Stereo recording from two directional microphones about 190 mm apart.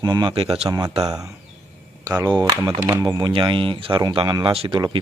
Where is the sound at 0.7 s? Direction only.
20° right (ahead or behind).